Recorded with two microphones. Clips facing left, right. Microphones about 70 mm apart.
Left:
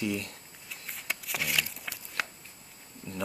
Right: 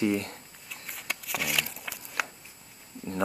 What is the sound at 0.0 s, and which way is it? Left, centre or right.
Speech, right.